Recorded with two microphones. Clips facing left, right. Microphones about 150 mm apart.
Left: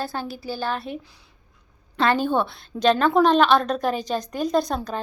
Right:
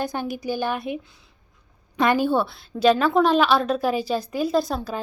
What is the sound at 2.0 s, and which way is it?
A woman's voice, 10° right (ahead or behind).